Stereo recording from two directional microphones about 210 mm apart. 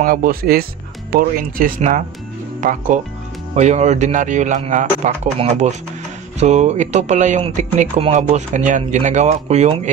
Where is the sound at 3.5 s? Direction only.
35° right (ahead or behind).